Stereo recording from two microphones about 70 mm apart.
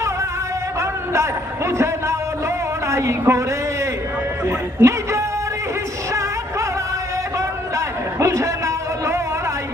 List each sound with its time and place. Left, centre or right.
0.8 s a man's voice: right
4.4 s speech: right
7.3 s a sound: right